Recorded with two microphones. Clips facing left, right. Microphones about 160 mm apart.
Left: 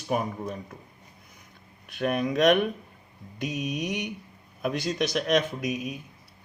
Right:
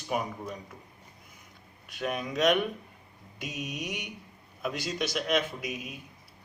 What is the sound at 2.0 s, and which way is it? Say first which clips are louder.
Speech: left 5 dB; 55° left (ahead or behind).